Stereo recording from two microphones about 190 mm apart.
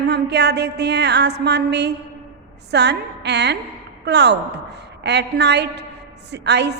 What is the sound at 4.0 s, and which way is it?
Speech, 65° right (ahead or behind).